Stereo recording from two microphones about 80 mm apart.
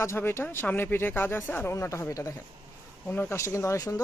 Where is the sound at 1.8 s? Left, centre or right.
Left.